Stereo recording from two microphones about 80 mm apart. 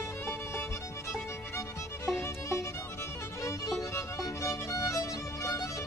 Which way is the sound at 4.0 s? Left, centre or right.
Left.